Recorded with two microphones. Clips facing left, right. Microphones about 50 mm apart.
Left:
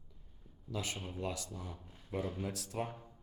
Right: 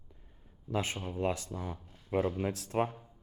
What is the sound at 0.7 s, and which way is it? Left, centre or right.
Speech, right.